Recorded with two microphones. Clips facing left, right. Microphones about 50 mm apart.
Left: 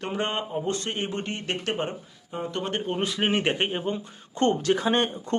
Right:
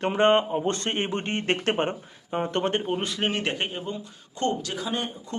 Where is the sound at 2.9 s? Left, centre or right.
Centre.